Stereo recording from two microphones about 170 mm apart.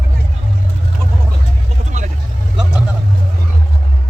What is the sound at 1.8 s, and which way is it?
Vehicle, 45° right (ahead or behind).